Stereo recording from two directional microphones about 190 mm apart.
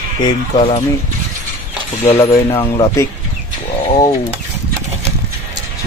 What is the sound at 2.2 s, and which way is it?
Speech, 30° left (ahead or behind).